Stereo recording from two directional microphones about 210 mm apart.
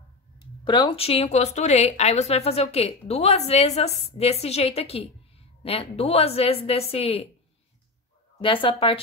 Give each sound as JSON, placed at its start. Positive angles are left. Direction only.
{"t": 0.7, "sound": "speech", "side_deg": 25}
{"t": 8.4, "sound": "speech", "side_deg": 25}